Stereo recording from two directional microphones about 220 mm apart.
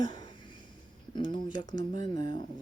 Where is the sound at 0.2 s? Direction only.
20° left (ahead or behind).